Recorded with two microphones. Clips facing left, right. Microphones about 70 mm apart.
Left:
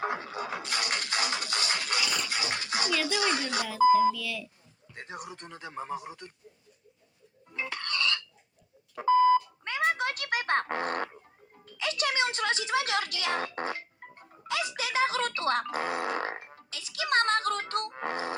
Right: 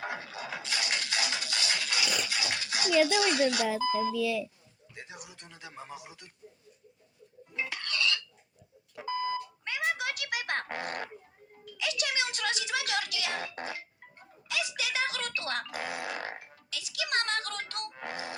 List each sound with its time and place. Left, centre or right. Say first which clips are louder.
0.0 s music: left 5 dB; left
3.1 s speech: right 3 dB; left
4.1 s speech: right 7 dB; right
4.9 s speech: left 6 dB; left
7.6 s a sound: left 1 dB; left
9.0 s music: left 11 dB; left
11.6 s speech: left 3 dB; left